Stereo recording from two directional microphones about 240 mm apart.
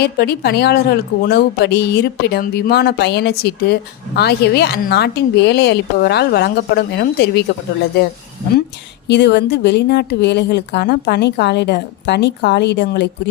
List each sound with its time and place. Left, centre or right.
0.0 s a woman's voice: left
9.0 s a woman's voice: left